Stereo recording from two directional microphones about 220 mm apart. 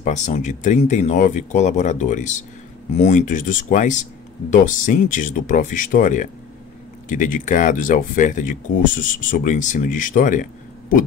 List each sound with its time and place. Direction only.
0.0 s speech: 35° left (ahead or behind)